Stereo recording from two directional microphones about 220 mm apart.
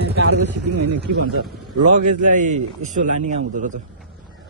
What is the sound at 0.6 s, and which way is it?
Speech, 90° right.